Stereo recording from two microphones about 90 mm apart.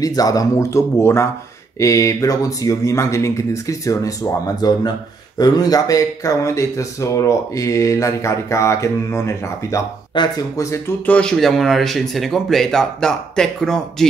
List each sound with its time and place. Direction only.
0.0 s speech: 40° left (ahead or behind)
10.1 s speech: 55° left (ahead or behind)
10.5 s speech: 35° left (ahead or behind)
11.1 s speech: 10° left (ahead or behind)